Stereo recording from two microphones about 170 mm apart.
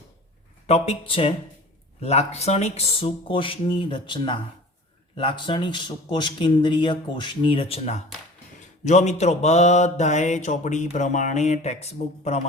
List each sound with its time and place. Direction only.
0.7 s speech: 35° left (ahead or behind)
8.8 s mantra: 45° left (ahead or behind)